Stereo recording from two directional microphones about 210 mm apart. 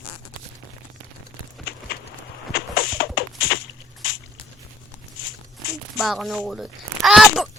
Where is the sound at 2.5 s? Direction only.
45° left (ahead or behind).